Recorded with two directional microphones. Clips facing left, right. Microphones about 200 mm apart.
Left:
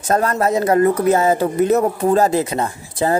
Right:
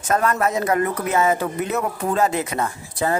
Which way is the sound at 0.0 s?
35° left (ahead or behind).